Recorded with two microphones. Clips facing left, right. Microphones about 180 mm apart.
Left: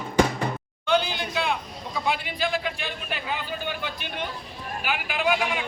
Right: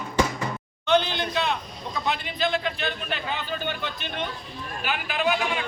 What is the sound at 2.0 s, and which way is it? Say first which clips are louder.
A man's voice: even; 10° left (ahead or behind).